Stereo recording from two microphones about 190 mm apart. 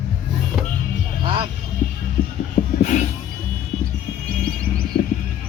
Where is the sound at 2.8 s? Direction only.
40° left (ahead or behind).